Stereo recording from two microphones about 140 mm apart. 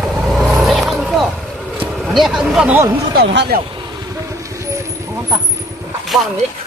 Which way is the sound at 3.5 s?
90° right.